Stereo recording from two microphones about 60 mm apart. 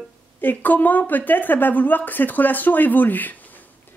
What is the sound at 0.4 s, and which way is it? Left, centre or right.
Speech, left.